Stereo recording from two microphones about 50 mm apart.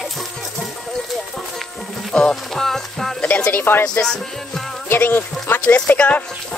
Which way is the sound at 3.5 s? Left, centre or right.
Left.